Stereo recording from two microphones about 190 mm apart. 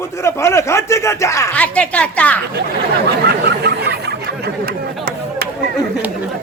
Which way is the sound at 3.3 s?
55° right (ahead or behind).